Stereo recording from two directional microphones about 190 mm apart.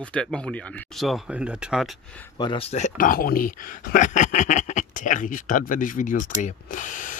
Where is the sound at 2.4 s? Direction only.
30° left (ahead or behind).